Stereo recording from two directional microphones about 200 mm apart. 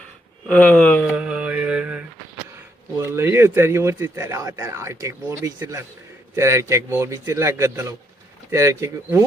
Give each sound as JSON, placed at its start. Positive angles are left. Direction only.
{"t": 0.4, "sound": "speech", "side_deg": 5}
{"t": 1.1, "sound": "mantra", "side_deg": -5}
{"t": 3.0, "sound": "a man's voice", "side_deg": -10}